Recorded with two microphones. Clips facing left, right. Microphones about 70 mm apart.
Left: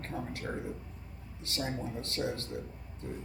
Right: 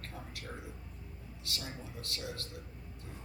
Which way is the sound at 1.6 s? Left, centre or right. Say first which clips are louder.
Left 9 dB; left.